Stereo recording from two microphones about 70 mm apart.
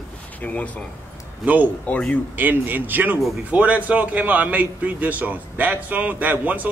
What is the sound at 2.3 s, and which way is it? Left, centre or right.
A man's voice, right.